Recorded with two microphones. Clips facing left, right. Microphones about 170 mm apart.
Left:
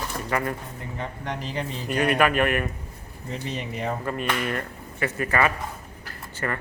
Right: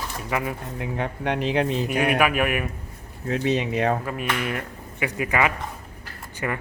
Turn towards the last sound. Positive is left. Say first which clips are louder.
# right 1 dB
turn(degrees=-10)  # may be behind; listen again after turning